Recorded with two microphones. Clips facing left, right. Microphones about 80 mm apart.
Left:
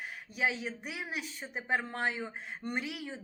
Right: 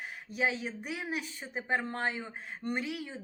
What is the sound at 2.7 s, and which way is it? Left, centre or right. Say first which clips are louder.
Speech: right 2 dB; centre.